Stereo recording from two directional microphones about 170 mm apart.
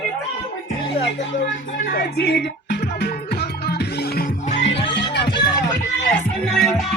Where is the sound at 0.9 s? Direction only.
35° left (ahead or behind).